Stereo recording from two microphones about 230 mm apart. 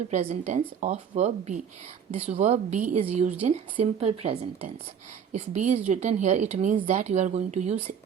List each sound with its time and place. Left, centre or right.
0.1 s speech: right